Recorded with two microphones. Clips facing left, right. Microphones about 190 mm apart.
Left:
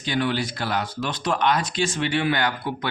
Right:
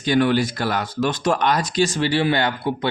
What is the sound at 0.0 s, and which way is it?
Speech, 50° right (ahead or behind).